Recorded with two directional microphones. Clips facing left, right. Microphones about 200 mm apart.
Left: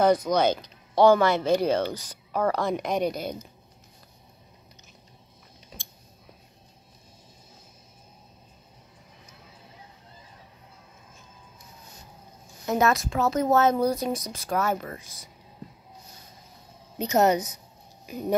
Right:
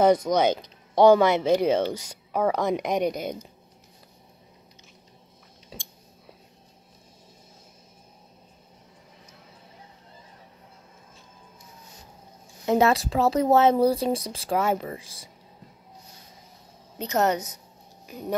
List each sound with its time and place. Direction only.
0.0 s speech: 20° right (ahead or behind)
12.6 s speech: 30° right (ahead or behind)
17.0 s speech: 15° left (ahead or behind)